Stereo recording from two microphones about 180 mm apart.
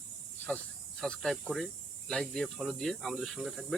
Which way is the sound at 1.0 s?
5° left (ahead or behind).